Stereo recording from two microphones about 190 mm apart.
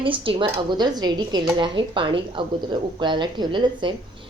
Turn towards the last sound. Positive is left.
turn(degrees=-25)  # may be behind; listen again after turning